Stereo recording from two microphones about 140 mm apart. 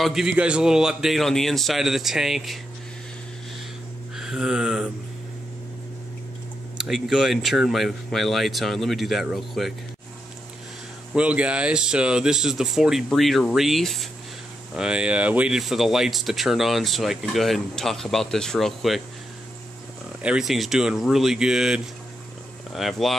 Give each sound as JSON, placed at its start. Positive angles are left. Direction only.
{"t": 0.0, "sound": "speech", "side_deg": -5}
{"t": 4.2, "sound": "a sound", "side_deg": -5}
{"t": 6.8, "sound": "speech", "side_deg": -5}
{"t": 11.1, "sound": "speech", "side_deg": -10}
{"t": 20.2, "sound": "speech", "side_deg": -5}